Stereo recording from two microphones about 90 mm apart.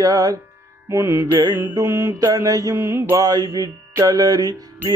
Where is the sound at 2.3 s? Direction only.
40° right (ahead or behind).